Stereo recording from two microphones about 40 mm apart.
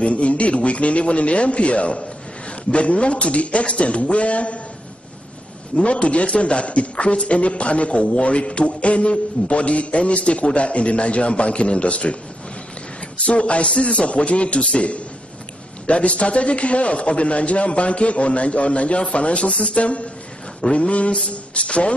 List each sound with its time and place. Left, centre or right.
0.0 s a man's voice: left
5.8 s a man's voice: left
13.2 s a man's voice: left
19.8 s a man's voice: left